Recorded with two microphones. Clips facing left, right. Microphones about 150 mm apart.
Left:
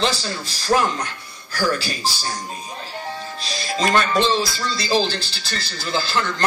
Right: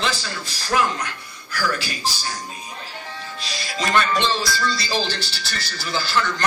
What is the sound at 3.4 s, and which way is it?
Speech, 35° left (ahead or behind).